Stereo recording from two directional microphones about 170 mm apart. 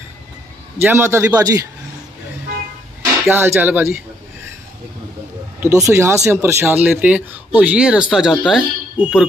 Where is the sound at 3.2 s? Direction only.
15° right (ahead or behind).